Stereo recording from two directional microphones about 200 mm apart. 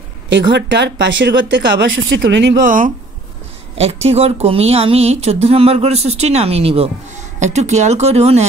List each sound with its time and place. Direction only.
0.3 s speech: 65° right (ahead or behind)
2.6 s speech: 40° right (ahead or behind)